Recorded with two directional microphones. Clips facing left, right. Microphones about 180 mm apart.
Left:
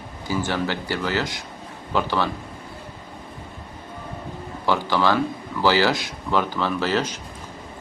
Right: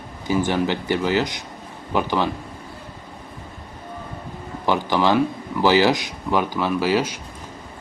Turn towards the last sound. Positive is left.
turn(degrees=-10)  # may be behind; listen again after turning